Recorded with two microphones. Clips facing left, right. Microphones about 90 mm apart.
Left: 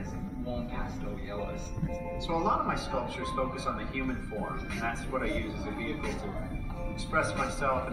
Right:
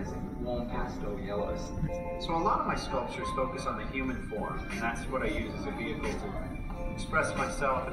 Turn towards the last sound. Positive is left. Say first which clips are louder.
# even
turn(degrees=0)  # may be behind; listen again after turning